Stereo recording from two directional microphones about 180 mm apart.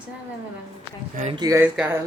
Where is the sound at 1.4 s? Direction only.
15° right (ahead or behind).